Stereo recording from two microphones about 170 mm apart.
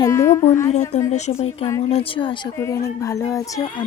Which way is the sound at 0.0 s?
15° left (ahead or behind).